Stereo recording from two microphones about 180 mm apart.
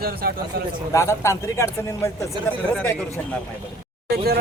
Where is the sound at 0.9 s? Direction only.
15° left (ahead or behind).